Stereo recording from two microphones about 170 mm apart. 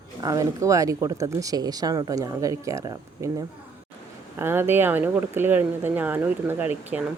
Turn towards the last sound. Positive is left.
turn(degrees=-10)  # may be behind; listen again after turning